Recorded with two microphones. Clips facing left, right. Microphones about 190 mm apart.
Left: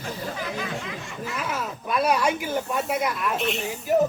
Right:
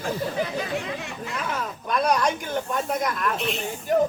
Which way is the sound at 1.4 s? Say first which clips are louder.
Right 1 dB; 5° left (ahead or behind).